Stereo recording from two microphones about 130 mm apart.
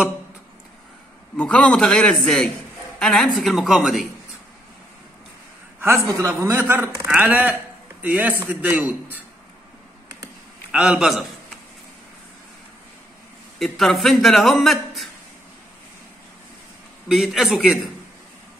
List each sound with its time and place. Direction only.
1.3 s a man's voice: 10° left (ahead or behind)
6.1 s a man's voice: 20° right (ahead or behind)
10.7 s a man's voice: 5° right (ahead or behind)
13.6 s speech: centre (ahead or behind)
17.1 s speech: centre (ahead or behind)